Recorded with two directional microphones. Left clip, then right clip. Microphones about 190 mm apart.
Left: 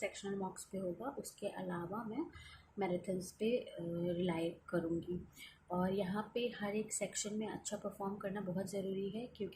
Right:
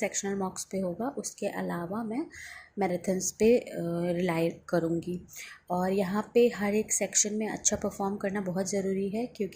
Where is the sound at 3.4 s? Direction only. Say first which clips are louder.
Right 14 dB; 35° right (ahead or behind).